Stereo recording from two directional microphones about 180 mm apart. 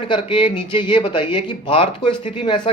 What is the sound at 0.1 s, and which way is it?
Speech, 25° left (ahead or behind).